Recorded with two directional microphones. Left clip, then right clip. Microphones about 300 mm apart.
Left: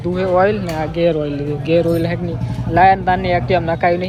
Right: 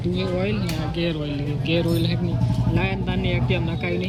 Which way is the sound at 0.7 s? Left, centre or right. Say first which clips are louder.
Left 10 dB; centre.